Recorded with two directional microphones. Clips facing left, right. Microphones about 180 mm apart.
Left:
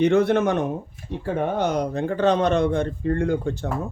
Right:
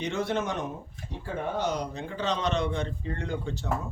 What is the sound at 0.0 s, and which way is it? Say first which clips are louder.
Speech: left 11 dB; 60° left (ahead or behind).